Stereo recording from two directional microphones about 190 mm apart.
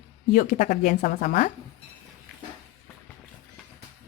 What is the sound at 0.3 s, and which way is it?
A woman's voice, 40° left (ahead or behind).